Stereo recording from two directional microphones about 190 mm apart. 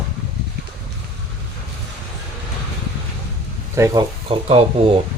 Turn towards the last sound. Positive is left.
turn(degrees=-30)  # may be behind; listen again after turning